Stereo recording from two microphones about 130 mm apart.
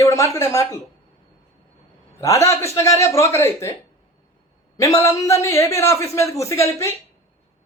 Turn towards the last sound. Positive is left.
turn(degrees=25)  # may be behind; listen again after turning